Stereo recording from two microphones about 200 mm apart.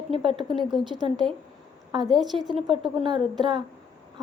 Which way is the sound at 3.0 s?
25° right (ahead or behind).